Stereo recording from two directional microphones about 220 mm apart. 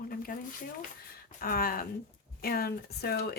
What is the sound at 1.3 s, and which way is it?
A woman's voice, 40° left (ahead or behind).